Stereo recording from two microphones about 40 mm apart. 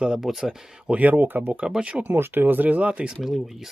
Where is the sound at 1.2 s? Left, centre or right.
Right.